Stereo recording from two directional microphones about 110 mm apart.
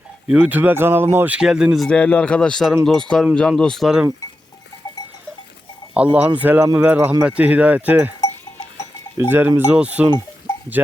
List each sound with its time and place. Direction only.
0.3 s speech: 15° right (ahead or behind)
1.4 s speech: 5° right (ahead or behind)
1.9 s speech: 10° left (ahead or behind)
5.9 s speech: 10° right (ahead or behind)
9.1 s speech: 20° right (ahead or behind)